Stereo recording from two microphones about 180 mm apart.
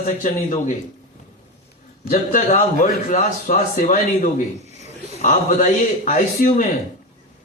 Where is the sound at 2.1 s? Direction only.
55° left (ahead or behind).